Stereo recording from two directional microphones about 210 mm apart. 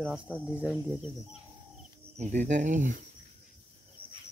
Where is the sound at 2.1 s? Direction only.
35° right (ahead or behind).